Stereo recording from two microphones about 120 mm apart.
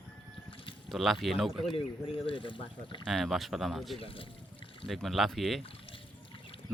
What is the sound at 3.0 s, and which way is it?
Speech, centre (ahead or behind).